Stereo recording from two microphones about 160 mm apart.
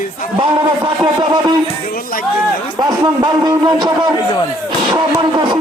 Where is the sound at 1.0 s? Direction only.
25° right (ahead or behind).